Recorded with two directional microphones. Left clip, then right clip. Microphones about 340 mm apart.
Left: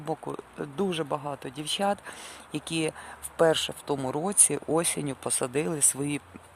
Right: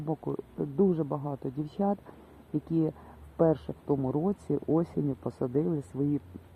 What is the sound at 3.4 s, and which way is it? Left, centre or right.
Speech, left.